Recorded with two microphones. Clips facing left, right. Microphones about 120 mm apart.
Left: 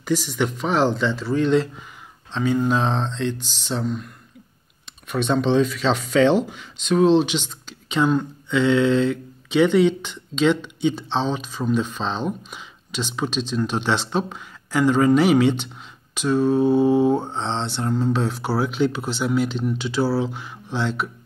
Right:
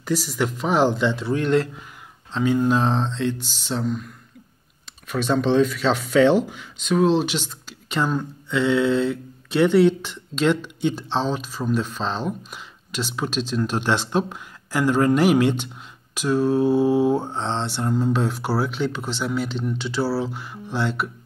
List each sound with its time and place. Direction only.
0.0 s speech: 5° right (ahead or behind)
0.6 s mantra: 10° right (ahead or behind)
2.6 s speech: 5° right (ahead or behind)
16.2 s mantra: 10° right (ahead or behind)